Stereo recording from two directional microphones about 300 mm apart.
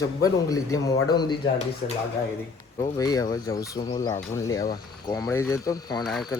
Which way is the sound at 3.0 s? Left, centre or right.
Centre.